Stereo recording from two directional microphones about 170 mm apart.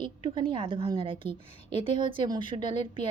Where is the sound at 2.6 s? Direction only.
45° left (ahead or behind).